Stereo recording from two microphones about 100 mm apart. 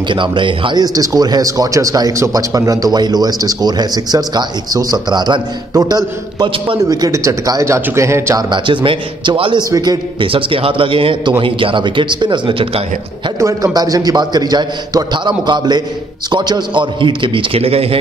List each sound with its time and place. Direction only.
0.1 s a man's voice: 55° right (ahead or behind); by 8.4 s 25° right (ahead or behind)
8.4 s a man's voice: 50° right (ahead or behind)
10.2 s a man's voice: 65° right (ahead or behind)
13.4 s a man's voice: 35° right (ahead or behind); by 17.9 s 80° right